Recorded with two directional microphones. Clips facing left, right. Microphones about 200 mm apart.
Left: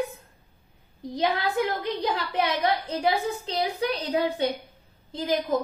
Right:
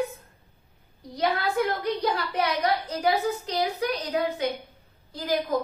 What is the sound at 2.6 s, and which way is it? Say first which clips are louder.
A woman's voice: even; 25° left (ahead or behind).